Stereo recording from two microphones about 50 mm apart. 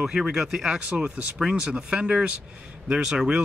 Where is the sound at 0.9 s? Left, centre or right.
Right.